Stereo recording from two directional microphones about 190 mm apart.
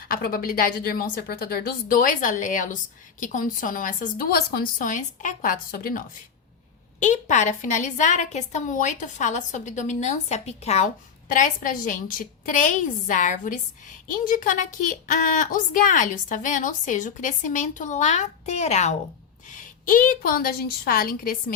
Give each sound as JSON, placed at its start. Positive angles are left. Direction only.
{"t": 0.1, "sound": "a woman's voice", "side_deg": 50}
{"t": 7.0, "sound": "a woman's voice", "side_deg": 40}